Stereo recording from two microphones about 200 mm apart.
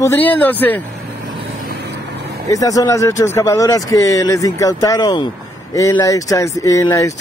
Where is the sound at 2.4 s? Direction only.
15° left (ahead or behind).